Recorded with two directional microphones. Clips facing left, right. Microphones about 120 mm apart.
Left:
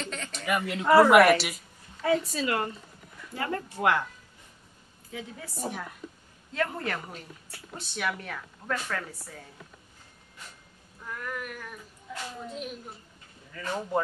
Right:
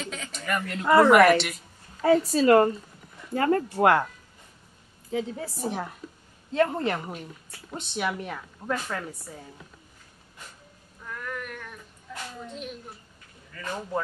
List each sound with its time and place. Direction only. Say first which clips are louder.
0.0 s speech: even; 5° right (ahead or behind)
2.0 s a woman's voice: right 6 dB; 40° right (ahead or behind)
5.1 s a woman's voice: right 9 dB; 30° right (ahead or behind)
11.1 s a sound: right 1 dB; 5° left (ahead or behind)
12.4 s a woman's voice: even; 5° left (ahead or behind)